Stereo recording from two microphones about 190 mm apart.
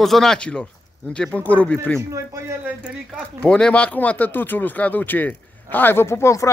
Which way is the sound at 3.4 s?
5° left (ahead or behind).